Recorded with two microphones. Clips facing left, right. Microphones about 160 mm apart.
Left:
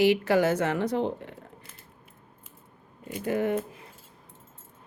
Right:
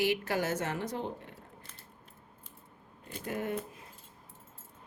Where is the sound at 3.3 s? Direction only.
90° left.